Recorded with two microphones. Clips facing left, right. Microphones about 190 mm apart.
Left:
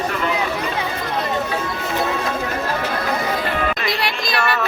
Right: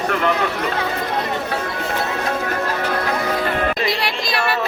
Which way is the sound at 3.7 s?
25° right (ahead or behind).